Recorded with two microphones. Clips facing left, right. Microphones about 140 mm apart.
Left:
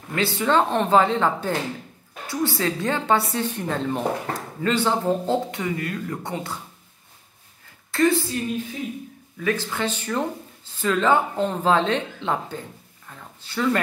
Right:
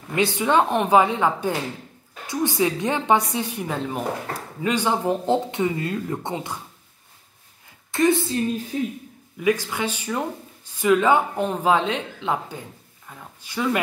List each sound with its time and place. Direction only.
0.1 s a woman's voice: 20° right (ahead or behind)
7.9 s a woman's voice: 20° right (ahead or behind)
8.7 s a man's voice: 40° right (ahead or behind)
9.4 s a woman's voice: 10° right (ahead or behind)
13.1 s a sound: 10° right (ahead or behind)
13.4 s a woman's voice: 10° right (ahead or behind)